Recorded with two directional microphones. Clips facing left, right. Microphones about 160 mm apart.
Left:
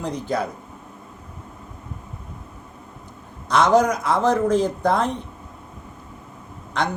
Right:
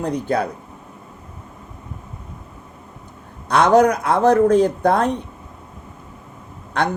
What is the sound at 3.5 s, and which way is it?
A man's voice, 60° right (ahead or behind).